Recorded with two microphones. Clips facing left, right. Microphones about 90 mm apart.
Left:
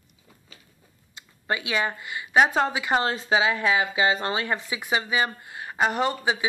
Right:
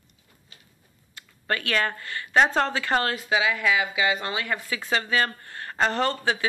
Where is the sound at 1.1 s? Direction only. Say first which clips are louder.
Even; 15° left (ahead or behind).